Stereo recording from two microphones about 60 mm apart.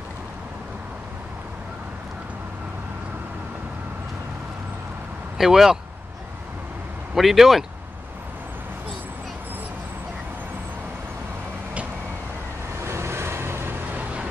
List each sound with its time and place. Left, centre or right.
5.4 s speech: centre
7.2 s speech: centre
12.8 s vehicle: right
13.9 s vehicle: right